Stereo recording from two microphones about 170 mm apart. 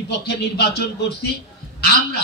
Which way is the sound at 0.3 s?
70° left (ahead or behind).